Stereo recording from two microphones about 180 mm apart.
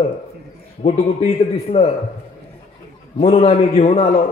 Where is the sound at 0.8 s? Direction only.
35° left (ahead or behind).